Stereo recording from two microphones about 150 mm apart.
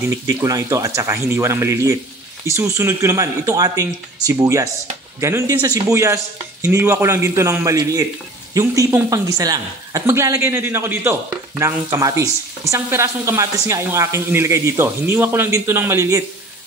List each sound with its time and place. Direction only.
0.3 s a woman's voice: 20° right (ahead or behind)